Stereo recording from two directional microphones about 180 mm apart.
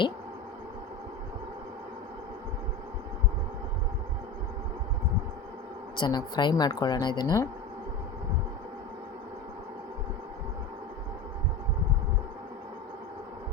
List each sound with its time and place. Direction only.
6.0 s a woman's voice: 25° left (ahead or behind)